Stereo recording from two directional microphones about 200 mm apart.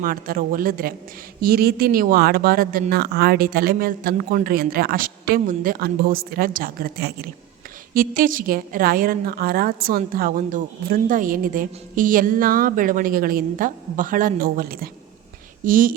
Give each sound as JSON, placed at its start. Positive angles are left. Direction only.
{"t": 0.0, "sound": "a woman's voice", "side_deg": -45}